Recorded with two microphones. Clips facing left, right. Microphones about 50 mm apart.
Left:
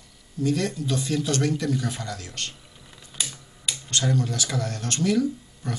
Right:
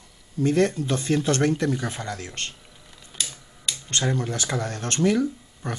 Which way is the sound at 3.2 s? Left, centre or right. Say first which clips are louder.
Even; centre.